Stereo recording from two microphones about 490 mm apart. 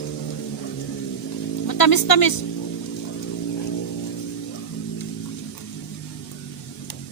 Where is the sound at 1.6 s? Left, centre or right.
Left.